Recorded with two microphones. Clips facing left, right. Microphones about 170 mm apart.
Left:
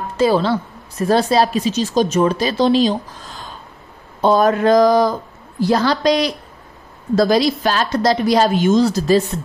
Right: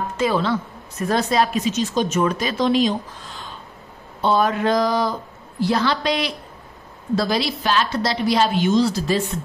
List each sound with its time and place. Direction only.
0.2 s a woman's voice: 35° left (ahead or behind)